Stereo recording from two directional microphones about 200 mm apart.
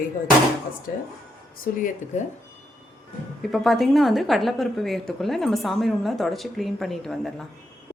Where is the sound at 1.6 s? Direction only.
40° left (ahead or behind).